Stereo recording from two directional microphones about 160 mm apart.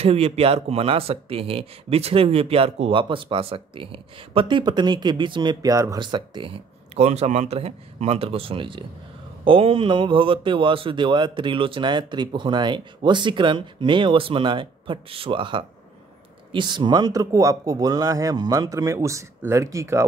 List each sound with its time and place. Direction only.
0.0 s speech: 40° right (ahead or behind); by 20.1 s 20° right (ahead or behind)